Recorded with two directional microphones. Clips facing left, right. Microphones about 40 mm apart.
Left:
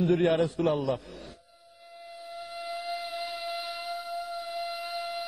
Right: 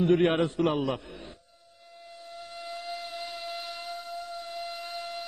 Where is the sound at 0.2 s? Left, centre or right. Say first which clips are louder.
Even; right.